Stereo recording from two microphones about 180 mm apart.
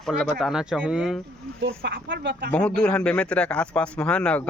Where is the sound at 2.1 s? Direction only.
90° right.